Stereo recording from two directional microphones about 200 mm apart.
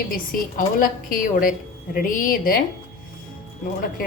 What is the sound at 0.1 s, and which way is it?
A woman's voice, 45° left (ahead or behind).